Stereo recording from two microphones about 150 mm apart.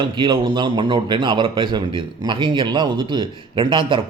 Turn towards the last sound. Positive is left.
turn(degrees=-35)  # may be behind; listen again after turning